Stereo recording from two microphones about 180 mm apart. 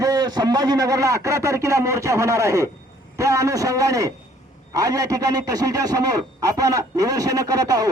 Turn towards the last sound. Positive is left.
turn(degrees=-20)  # may be behind; listen again after turning